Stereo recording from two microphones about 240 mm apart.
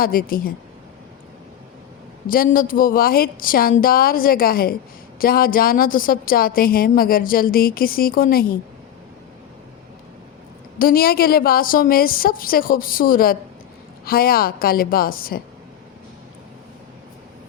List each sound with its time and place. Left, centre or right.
0.0 s a woman's voice: left
2.3 s a woman's voice: left
10.8 s a woman's voice: left